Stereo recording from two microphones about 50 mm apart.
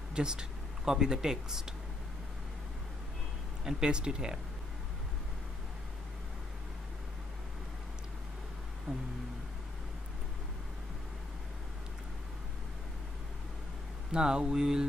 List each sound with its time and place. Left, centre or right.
0.1 s speech: centre
3.6 s speech: centre
14.1 s speech: centre